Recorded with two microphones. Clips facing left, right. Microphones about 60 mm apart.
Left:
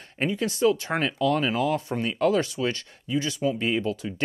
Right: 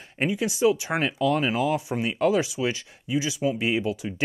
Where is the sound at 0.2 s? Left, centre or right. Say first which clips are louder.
Right 1 dB; centre.